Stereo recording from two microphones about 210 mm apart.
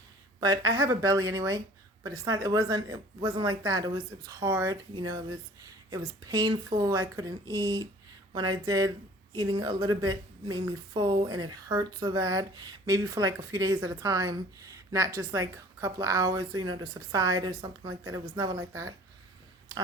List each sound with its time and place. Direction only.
0.3 s a woman's voice: 20° right (ahead or behind)